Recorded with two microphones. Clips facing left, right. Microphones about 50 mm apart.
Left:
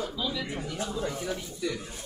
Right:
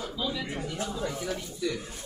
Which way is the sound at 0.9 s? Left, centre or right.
Centre.